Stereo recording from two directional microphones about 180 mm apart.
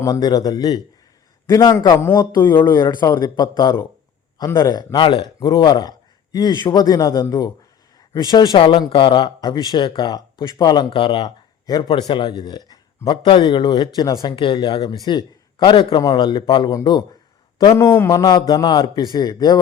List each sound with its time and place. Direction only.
0.0 s a man's voice: 20° left (ahead or behind)